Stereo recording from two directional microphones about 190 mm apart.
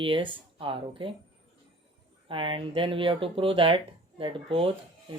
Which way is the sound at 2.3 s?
25° right (ahead or behind).